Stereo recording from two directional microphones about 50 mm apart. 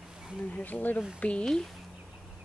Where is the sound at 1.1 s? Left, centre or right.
Left.